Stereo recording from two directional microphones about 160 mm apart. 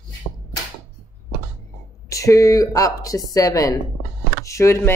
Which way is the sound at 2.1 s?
20° left (ahead or behind).